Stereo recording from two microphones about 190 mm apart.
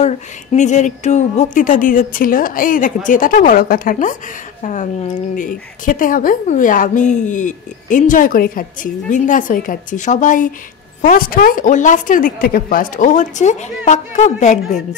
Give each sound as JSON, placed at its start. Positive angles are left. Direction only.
{"t": 0.0, "sound": "a woman's voice", "side_deg": 40}